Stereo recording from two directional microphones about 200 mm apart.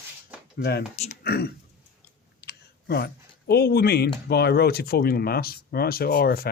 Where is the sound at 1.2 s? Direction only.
55° left (ahead or behind).